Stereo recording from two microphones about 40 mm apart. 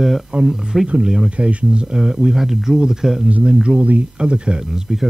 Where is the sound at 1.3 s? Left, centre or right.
Right.